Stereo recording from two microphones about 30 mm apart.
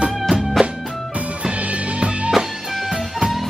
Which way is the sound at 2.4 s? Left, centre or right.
Right.